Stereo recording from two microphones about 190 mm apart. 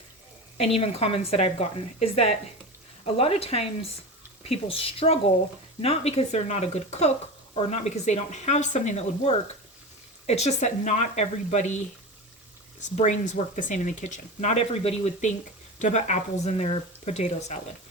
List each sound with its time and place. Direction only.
0.5 s speech: 30° left (ahead or behind)
13.0 s speech: 40° left (ahead or behind)